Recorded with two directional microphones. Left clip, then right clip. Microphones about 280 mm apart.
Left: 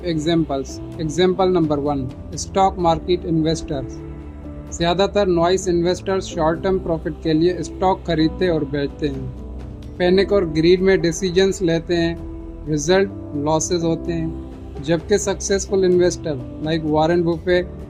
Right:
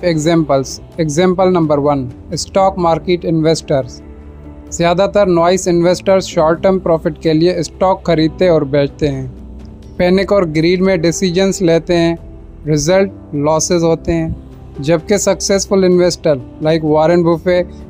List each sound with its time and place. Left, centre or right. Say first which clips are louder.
0.0 s speech: right 7 dB; right